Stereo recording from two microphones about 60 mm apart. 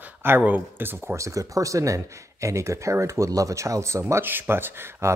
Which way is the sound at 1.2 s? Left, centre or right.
Right.